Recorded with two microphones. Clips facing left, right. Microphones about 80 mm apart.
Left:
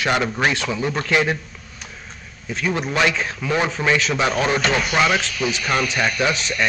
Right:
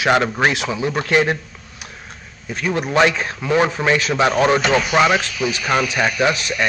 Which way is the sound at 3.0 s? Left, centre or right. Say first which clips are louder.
Right 4 dB; right.